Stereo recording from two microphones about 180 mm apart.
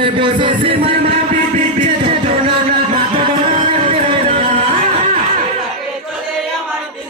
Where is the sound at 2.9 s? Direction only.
25° right (ahead or behind).